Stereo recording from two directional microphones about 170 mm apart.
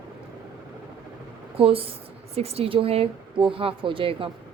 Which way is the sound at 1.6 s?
35° right (ahead or behind).